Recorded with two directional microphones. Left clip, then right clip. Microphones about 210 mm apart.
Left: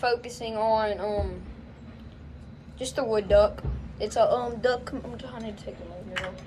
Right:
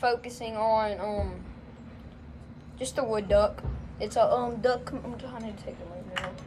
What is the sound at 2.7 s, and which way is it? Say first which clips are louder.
Speech: left 2 dB; 15° right (ahead or behind).